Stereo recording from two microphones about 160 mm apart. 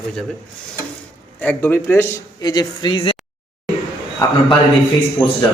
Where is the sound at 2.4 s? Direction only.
25° left (ahead or behind).